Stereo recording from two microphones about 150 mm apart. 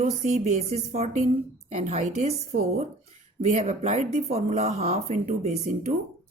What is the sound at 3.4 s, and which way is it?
Speech, 50° right (ahead or behind).